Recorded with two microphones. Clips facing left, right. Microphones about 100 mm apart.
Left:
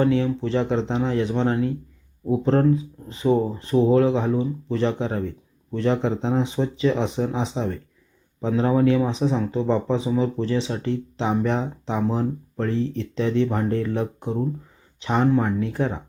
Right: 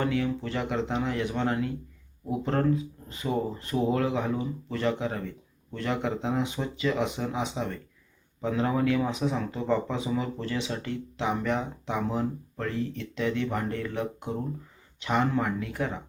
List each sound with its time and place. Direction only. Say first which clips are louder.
0.0 s speech: left 7 dB; 30° left (ahead or behind)